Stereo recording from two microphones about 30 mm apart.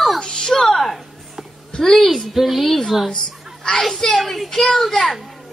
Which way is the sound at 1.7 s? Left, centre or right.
Centre.